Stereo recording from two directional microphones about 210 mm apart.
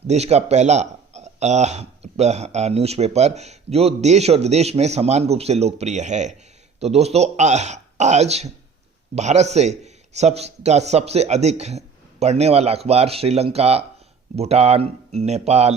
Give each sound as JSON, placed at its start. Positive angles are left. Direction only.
{"t": 0.1, "sound": "a man's voice", "side_deg": -30}